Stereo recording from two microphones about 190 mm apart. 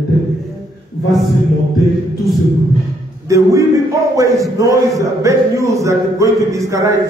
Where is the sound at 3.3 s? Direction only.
15° right (ahead or behind).